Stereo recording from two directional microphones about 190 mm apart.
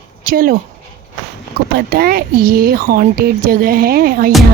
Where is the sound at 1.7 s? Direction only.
55° right (ahead or behind).